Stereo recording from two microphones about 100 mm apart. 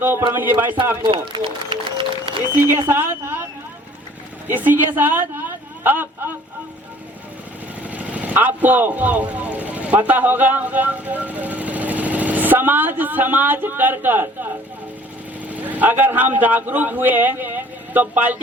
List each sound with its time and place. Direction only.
0.0 s speech: 20° right (ahead or behind)
1.1 s speech: 60° right (ahead or behind)
1.7 s music: 60° right (ahead or behind)
2.6 s speech: 25° right (ahead or behind)
4.4 s a man's voice: 20° right (ahead or behind)
7.9 s a man's voice: 15° right (ahead or behind)